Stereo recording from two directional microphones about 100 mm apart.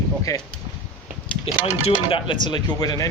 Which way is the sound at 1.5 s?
80° left.